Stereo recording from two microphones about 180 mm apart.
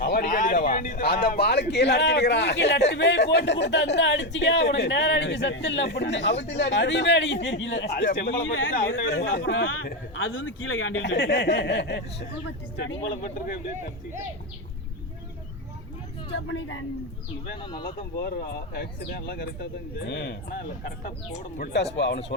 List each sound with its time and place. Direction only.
0.0 s a man's voice: 55° left (ahead or behind); by 8.7 s 75° left (ahead or behind)
8.9 s speech: 65° left (ahead or behind); by 13.0 s 80° left
16.3 s speech: 90° left
17.7 s speech: 25° left (ahead or behind)
18.2 s speech: 60° left (ahead or behind)
21.6 s a man's voice: 70° left (ahead or behind)